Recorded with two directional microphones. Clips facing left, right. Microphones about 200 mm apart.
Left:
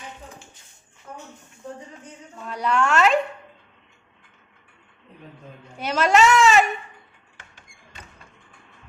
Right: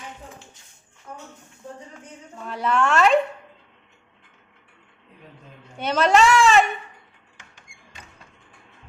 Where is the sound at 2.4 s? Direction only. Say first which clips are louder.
Even; centre (ahead or behind).